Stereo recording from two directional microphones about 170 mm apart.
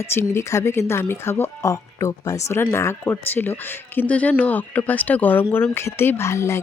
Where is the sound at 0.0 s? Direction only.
15° left (ahead or behind).